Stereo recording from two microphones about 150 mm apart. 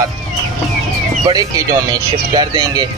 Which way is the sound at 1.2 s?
25° right (ahead or behind).